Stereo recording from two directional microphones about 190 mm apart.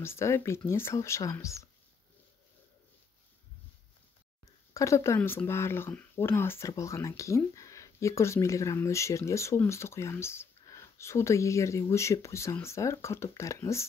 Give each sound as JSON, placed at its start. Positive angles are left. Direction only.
{"t": 0.0, "sound": "speech", "side_deg": 15}
{"t": 4.7, "sound": "speech", "side_deg": 15}